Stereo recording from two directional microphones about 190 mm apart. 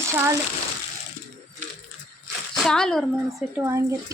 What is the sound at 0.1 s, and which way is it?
Speech, 15° right (ahead or behind).